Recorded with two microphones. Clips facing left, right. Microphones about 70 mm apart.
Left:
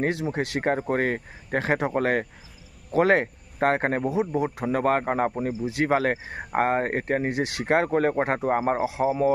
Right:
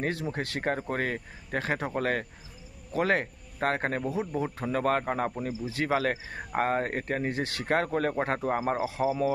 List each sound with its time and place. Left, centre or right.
0.1 s speech: centre
0.6 s speech: left
4.1 s speech: centre
5.6 s speech: centre
5.9 s speech: left
7.2 s speech: centre
7.6 s speech: left
9.0 s speech: left